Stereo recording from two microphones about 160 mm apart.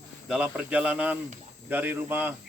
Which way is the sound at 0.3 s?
5° right (ahead or behind).